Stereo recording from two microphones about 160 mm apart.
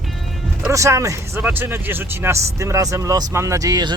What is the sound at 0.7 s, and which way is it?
Speech, 20° right (ahead or behind).